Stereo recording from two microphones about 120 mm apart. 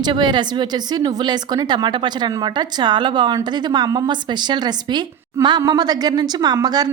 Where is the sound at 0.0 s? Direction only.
40° right (ahead or behind).